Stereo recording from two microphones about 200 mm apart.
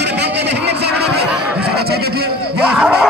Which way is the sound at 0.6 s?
55° right (ahead or behind).